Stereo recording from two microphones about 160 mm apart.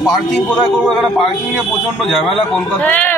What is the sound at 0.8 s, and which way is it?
A man's voice, 5° left (ahead or behind).